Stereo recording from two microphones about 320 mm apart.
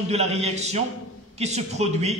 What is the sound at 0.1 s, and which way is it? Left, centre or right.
A man's voice, centre.